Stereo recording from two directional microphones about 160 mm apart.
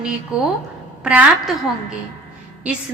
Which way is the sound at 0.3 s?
20° left (ahead or behind).